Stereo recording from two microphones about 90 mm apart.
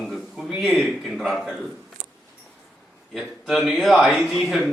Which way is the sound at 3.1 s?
Centre (ahead or behind).